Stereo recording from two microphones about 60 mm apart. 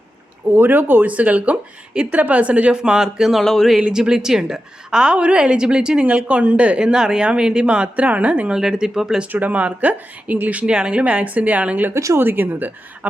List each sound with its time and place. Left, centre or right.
0.5 s speech: right; by 3.4 s centre
3.4 s speech: centre
3.8 s speech: centre
6.1 s speech: right; by 9.2 s centre
9.3 s speech: right
10.5 s speech: centre
12.1 s a woman's voice: right